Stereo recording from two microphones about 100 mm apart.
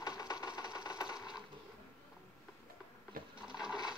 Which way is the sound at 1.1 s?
5° right (ahead or behind).